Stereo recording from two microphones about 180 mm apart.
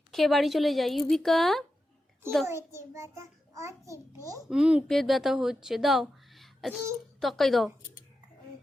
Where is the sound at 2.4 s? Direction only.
15° right (ahead or behind).